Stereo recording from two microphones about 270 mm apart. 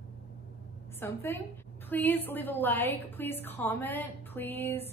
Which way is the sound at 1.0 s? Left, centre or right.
Centre.